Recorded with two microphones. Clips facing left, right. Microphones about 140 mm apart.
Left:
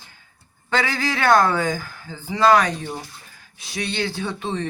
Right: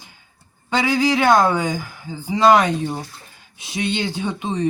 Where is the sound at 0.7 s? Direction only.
15° right (ahead or behind).